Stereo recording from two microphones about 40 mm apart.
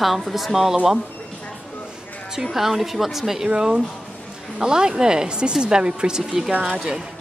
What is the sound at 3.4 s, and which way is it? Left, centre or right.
Speech, right.